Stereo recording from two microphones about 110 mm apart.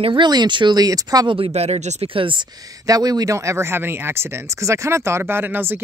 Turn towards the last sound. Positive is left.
turn(degrees=-20)  # may be behind; listen again after turning